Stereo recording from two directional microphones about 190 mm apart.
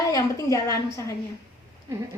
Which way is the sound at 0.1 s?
20° left (ahead or behind).